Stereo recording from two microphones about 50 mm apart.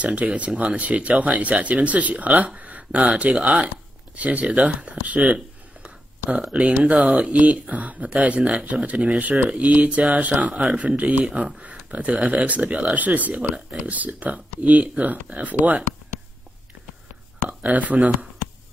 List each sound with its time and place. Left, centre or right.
0.0 s speech: right
11.2 s speech: centre
17.5 s speech: right